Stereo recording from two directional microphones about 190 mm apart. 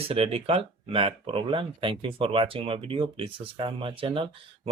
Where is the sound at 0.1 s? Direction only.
30° right (ahead or behind).